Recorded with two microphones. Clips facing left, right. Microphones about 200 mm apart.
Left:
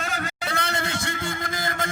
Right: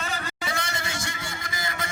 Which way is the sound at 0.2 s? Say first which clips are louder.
Left 3 dB; 60° left (ahead or behind).